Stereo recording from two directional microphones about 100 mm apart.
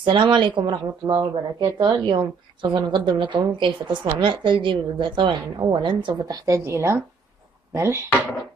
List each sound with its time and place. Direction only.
0.0 s a woman's voice: 50° right (ahead or behind); by 8.0 s 25° right (ahead or behind)